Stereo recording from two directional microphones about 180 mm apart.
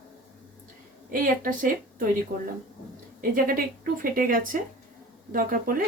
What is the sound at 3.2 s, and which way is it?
A woman's voice, 50° right (ahead or behind).